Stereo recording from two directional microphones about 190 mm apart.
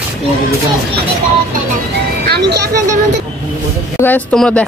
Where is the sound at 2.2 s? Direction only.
60° right (ahead or behind).